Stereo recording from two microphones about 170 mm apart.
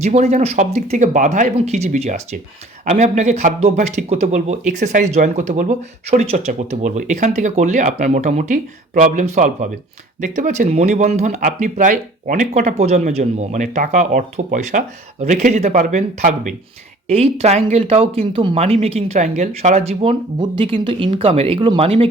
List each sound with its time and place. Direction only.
0.0 s speech: 40° right (ahead or behind)
17.1 s speech: 35° right (ahead or behind)